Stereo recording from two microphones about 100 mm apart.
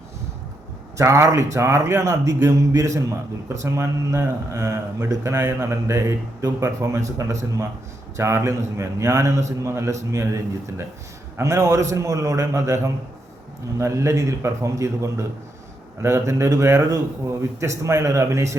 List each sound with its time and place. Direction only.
0.9 s a man's voice: 30° right (ahead or behind)